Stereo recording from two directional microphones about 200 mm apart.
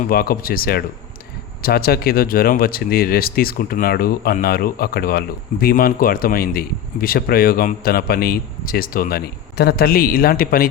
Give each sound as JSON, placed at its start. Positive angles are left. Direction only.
{"t": 0.0, "sound": "speech", "side_deg": 50}